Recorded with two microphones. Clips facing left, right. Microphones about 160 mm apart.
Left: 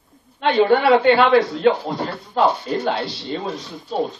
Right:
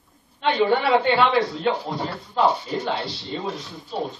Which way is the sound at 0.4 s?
80° left.